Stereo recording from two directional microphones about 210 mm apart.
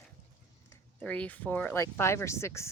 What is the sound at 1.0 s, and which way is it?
Speech, 5° left (ahead or behind).